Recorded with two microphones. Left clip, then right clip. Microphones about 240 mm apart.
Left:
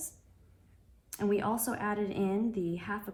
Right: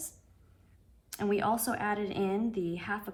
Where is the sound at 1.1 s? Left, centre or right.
Right.